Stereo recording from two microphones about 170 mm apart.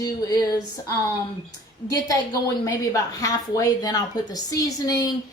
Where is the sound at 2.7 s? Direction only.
20° left (ahead or behind).